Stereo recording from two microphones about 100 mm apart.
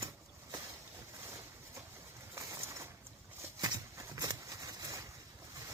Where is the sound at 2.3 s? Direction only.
30° right (ahead or behind).